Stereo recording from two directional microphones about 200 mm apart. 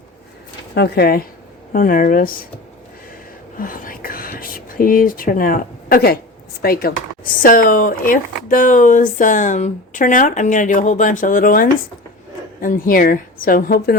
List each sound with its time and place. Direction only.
0.7 s a woman's voice: 55° left (ahead or behind)
3.6 s whispering: 45° left (ahead or behind)
6.6 s a woman's voice: 50° left (ahead or behind)